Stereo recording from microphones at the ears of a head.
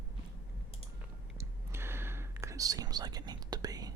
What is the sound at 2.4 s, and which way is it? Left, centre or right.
Whispering, right.